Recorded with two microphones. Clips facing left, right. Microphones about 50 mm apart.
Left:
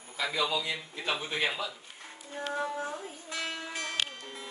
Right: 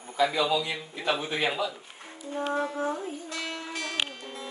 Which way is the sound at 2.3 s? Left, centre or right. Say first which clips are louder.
Right 6 dB; right.